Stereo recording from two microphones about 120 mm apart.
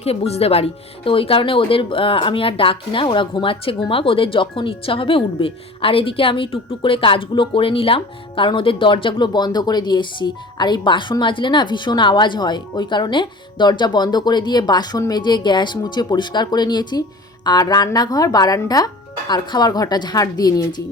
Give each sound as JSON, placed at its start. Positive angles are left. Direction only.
{"t": 0.0, "sound": "speech", "side_deg": 55}